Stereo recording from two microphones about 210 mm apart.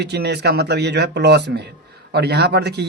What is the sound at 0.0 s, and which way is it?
Speech, 50° right (ahead or behind).